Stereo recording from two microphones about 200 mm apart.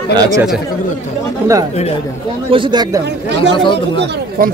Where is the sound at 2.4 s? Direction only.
25° right (ahead or behind).